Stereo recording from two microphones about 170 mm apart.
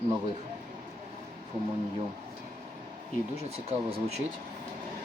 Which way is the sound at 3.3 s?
35° right (ahead or behind).